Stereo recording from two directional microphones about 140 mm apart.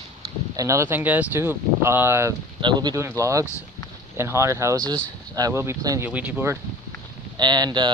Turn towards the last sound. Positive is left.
turn(degrees=-30)  # may be behind; listen again after turning